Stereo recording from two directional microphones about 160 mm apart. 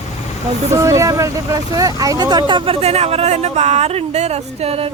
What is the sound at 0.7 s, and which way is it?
Speech, 20° right (ahead or behind).